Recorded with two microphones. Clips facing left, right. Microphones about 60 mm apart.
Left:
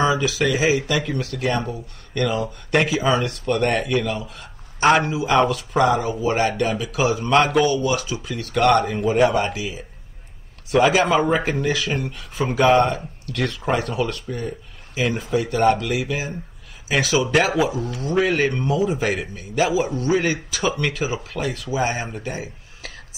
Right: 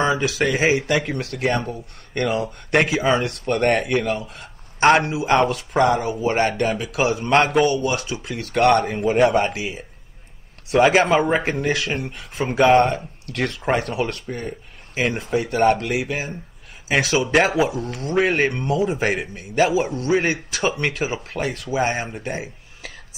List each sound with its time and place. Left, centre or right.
0.2 s speech: right
4.0 s a man's voice: right
15.0 s speech: right